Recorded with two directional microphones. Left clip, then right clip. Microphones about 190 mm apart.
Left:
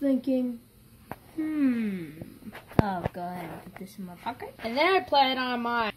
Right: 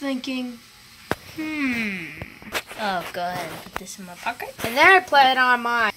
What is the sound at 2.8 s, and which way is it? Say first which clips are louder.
Speech: right 7 dB; 5° right (ahead or behind).